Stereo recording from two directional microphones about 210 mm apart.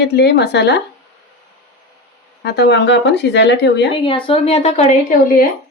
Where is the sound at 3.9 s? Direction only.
25° left (ahead or behind).